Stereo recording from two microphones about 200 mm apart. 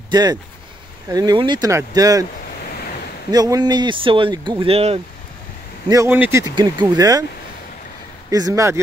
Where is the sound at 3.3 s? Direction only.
20° right (ahead or behind).